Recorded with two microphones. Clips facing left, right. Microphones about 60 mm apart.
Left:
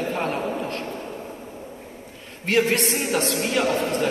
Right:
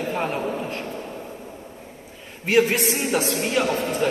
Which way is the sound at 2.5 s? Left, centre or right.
Centre.